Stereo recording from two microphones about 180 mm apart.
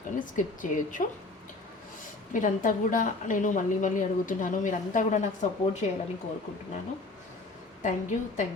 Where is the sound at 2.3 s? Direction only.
45° left (ahead or behind).